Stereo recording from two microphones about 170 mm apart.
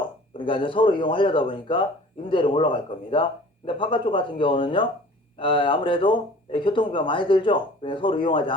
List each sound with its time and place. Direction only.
0.3 s speech: 30° left (ahead or behind)